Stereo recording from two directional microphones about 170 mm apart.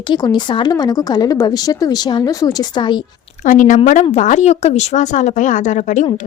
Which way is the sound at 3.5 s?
50° left (ahead or behind).